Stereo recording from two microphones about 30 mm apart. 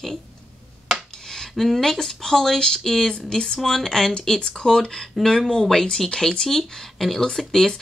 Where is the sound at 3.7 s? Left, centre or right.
Centre.